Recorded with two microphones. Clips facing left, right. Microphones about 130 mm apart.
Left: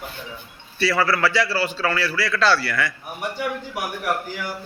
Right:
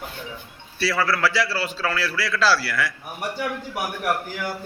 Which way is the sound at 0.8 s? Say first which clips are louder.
Left 2 dB; centre (ahead or behind).